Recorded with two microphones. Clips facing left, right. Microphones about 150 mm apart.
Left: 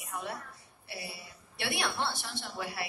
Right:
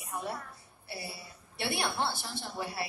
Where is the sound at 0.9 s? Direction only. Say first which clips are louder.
Right 1 dB; 30° right (ahead or behind).